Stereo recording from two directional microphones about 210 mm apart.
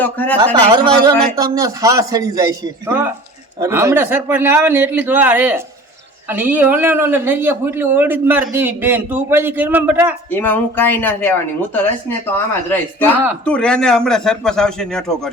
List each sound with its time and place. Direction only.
0.0 s speech: 10° left (ahead or behind)
0.7 s a man's voice: 20° right (ahead or behind)
10.3 s speech: 10° left (ahead or behind)
13.4 s a man's voice: 5° left (ahead or behind)